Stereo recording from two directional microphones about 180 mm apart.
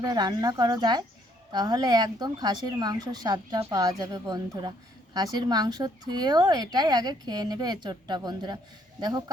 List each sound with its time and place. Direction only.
0.0 s speech: 20° right (ahead or behind)